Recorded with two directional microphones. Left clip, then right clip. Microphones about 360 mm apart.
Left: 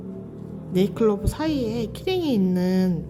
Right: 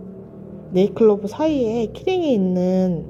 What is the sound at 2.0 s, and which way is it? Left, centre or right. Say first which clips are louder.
Speech: right 4 dB; centre.